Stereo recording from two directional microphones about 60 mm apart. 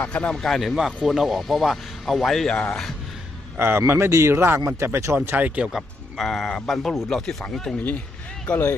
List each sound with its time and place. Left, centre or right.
0.0 s speech: left
0.3 s speech: centre
3.6 s speech: right
5.4 s speech: right
5.7 s speech: centre
7.8 s speech: left